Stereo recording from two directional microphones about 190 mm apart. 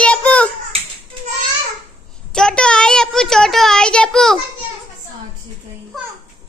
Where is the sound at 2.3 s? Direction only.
5° left (ahead or behind).